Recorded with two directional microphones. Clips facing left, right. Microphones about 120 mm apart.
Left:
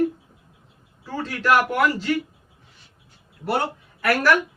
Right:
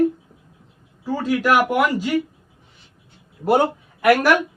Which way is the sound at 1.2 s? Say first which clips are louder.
Right 2 dB; 10° right (ahead or behind).